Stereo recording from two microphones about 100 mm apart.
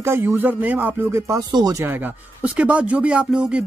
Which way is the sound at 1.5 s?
40° right (ahead or behind).